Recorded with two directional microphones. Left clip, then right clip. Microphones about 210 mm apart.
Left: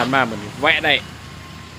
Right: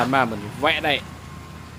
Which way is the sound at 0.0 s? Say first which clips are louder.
Left 2 dB; centre (ahead or behind).